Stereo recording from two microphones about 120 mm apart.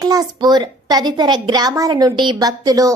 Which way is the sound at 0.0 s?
30° right (ahead or behind).